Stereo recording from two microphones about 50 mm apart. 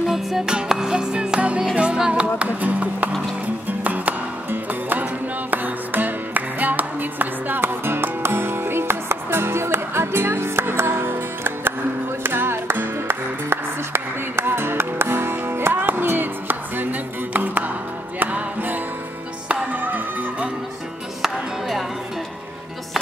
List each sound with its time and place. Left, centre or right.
0.0 s music: centre
2.3 s music: right
21.2 s music: centre